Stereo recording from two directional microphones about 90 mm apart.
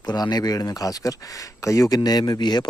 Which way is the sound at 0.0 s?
50° left (ahead or behind).